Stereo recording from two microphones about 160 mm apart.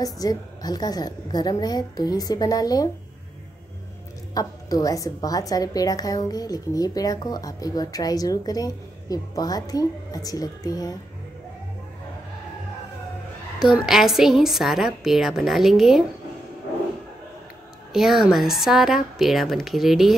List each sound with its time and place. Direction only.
0.0 s a woman's voice: 25° left (ahead or behind)
4.3 s a woman's voice: 25° left (ahead or behind)
13.6 s a woman's voice: 5° right (ahead or behind)
17.9 s a woman's voice: centre (ahead or behind)